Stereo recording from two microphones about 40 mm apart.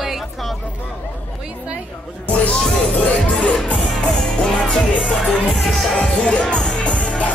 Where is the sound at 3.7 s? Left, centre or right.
Centre.